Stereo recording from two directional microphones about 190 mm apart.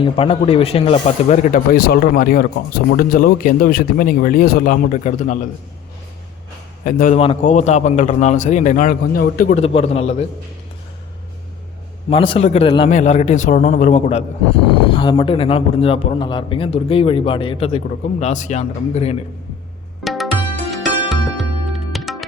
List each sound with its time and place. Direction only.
0.0 s speech: 30° left (ahead or behind)
6.8 s a man's voice: 45° left (ahead or behind)
9.6 s a man's voice: 30° left (ahead or behind)
12.1 s a man's voice: 30° left (ahead or behind)
12.9 s a man's voice: 40° left (ahead or behind)
21.1 s music: centre (ahead or behind)